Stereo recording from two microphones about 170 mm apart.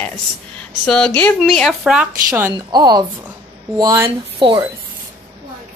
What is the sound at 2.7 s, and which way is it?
A woman's voice, 25° right (ahead or behind).